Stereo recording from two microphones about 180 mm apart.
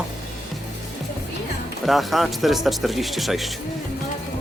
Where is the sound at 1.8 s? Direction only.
Centre (ahead or behind).